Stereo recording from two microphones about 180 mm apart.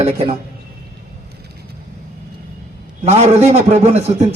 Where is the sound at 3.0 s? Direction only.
35° right (ahead or behind).